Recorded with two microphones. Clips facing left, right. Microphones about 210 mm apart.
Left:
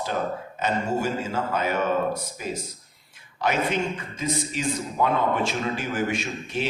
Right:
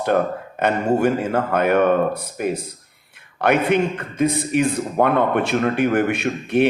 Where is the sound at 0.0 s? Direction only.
60° right (ahead or behind).